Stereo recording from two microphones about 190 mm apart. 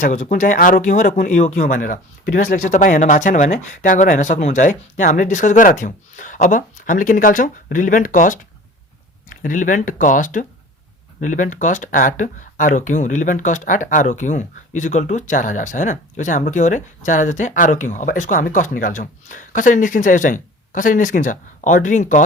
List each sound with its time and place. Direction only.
0.0 s speech: 40° left (ahead or behind)